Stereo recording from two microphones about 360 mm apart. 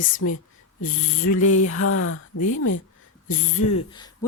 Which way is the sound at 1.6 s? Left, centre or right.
Left.